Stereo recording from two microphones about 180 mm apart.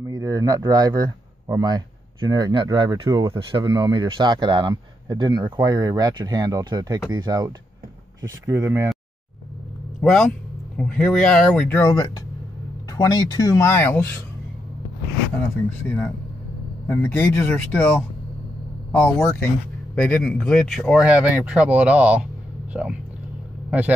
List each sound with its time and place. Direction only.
0.0 s speech: 20° right (ahead or behind)
9.9 s speech: centre (ahead or behind)
11.8 s speech: 20° left (ahead or behind)
16.8 s speech: 10° left (ahead or behind); by 22.9 s 5° right (ahead or behind)